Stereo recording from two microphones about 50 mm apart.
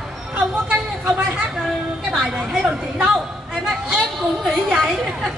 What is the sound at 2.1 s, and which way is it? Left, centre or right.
Speech, centre.